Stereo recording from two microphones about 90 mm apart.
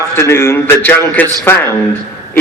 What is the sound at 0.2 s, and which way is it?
A man's voice, 30° left (ahead or behind).